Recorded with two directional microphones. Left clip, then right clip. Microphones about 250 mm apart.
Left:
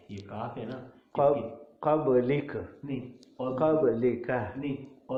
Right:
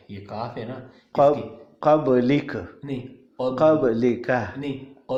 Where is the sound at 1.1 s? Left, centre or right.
Right.